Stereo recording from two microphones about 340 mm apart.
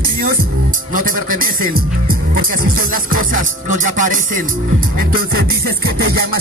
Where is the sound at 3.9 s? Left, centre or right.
Right.